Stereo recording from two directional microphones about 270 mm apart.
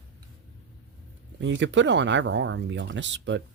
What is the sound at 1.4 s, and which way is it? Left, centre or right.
Speech, right.